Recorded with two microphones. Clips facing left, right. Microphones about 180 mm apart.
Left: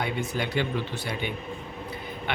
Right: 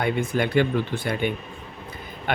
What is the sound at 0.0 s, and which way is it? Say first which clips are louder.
Speech: right 6 dB; 55° right (ahead or behind).